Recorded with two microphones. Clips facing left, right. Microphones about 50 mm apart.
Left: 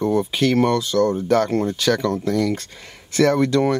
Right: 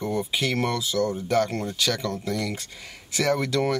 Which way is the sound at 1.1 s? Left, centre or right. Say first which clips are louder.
Left 5 dB; left.